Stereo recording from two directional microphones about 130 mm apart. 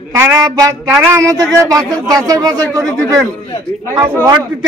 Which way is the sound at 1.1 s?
25° right (ahead or behind).